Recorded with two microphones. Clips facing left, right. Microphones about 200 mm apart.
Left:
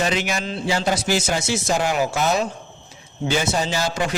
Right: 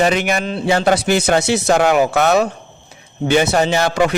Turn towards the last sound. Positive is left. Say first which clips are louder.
# right 8 dB
turn(degrees=-65)  # may be behind; listen again after turning